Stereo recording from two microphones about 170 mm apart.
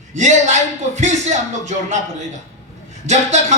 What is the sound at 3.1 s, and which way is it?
Speech, 45° right (ahead or behind).